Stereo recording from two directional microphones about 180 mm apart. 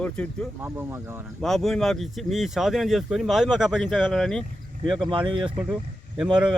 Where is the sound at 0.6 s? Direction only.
15° right (ahead or behind).